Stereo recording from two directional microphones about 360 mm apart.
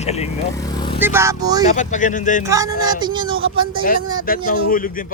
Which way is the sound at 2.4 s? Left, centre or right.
Centre.